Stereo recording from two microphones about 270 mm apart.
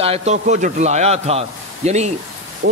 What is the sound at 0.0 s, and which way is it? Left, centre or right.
A man's voice, right.